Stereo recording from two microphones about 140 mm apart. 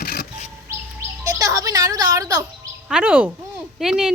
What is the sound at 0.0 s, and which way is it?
Vehicle, 90° left.